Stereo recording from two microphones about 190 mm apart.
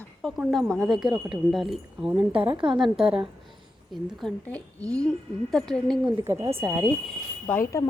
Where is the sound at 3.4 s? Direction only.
Centre (ahead or behind).